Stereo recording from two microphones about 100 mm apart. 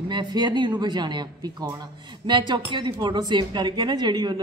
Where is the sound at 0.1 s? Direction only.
45° right (ahead or behind).